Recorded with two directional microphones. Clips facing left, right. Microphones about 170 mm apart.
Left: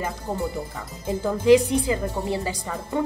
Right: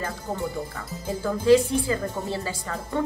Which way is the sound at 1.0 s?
15° left (ahead or behind).